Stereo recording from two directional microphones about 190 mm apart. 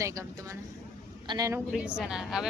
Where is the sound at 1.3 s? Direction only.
20° right (ahead or behind).